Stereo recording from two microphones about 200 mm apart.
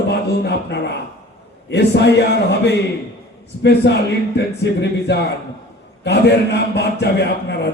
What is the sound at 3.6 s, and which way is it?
A man's voice, 60° left (ahead or behind).